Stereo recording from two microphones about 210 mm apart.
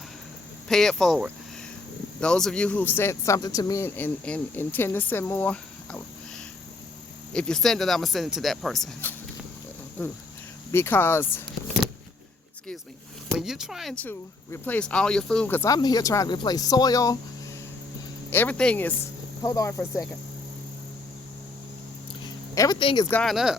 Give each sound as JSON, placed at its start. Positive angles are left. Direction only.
{"t": 0.7, "sound": "speech", "side_deg": 0}
{"t": 10.7, "sound": "speech", "side_deg": 10}
{"t": 13.3, "sound": "speech", "side_deg": 0}
{"t": 18.3, "sound": "speech", "side_deg": 10}
{"t": 22.5, "sound": "speech", "side_deg": 20}
{"t": 23.0, "sound": "speech", "side_deg": 5}